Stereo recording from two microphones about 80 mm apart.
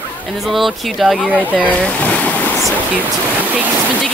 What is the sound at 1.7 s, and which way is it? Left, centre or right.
Boat, centre.